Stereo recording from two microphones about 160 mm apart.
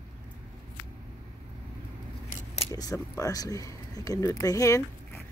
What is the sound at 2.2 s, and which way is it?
Scissors, 40° left (ahead or behind).